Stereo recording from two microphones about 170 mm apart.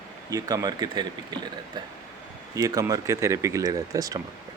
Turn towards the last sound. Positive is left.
turn(degrees=-20)  # may be behind; listen again after turning